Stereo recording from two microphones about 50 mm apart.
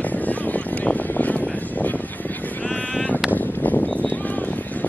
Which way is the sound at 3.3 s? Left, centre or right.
Left.